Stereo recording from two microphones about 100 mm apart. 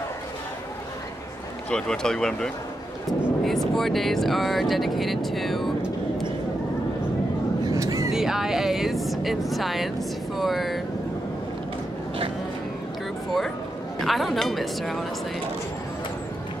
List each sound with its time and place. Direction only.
1.7 s speech: 5° left (ahead or behind)
7.6 s vehicle: 35° right (ahead or behind)
8.1 s speech: 5° right (ahead or behind)
13.9 s a woman's voice: centre (ahead or behind)